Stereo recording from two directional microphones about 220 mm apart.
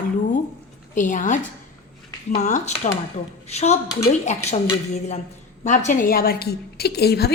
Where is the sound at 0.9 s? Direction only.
35° left (ahead or behind).